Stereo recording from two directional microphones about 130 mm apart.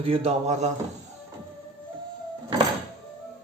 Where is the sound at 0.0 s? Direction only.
50° right (ahead or behind).